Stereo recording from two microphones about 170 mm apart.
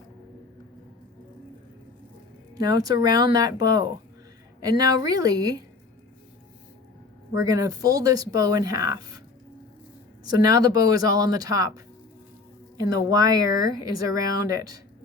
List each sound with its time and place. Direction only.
2.6 s speech: 25° right (ahead or behind)
7.3 s speech: 20° right (ahead or behind)
10.2 s speech: 20° right (ahead or behind)